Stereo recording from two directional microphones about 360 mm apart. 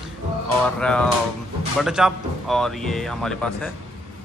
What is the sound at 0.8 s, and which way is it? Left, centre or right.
Speech, centre.